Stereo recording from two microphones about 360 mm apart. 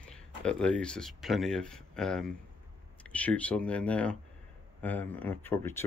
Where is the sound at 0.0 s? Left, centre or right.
Centre.